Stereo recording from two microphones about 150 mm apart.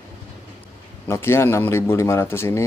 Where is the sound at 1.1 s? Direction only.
15° left (ahead or behind).